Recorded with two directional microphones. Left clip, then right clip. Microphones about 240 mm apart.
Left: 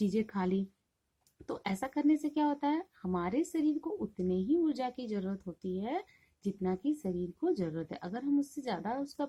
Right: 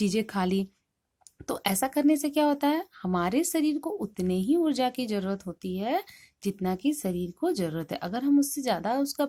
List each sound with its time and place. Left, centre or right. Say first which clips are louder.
0.0 s a woman's voice: right 6 dB; right